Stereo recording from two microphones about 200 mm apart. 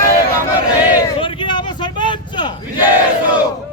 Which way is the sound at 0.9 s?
25° left (ahead or behind).